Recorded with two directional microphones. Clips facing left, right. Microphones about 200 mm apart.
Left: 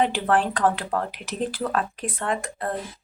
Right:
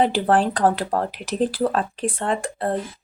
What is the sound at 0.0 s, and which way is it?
Speech, 35° right (ahead or behind).